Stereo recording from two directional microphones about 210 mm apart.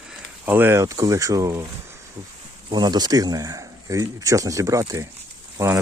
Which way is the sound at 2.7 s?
20° right (ahead or behind).